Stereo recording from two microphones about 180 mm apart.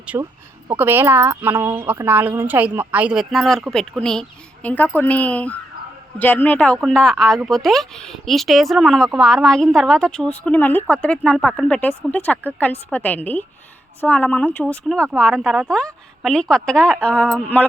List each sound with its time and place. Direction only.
0.1 s a woman's voice: 20° right (ahead or behind); by 17.7 s 5° left (ahead or behind)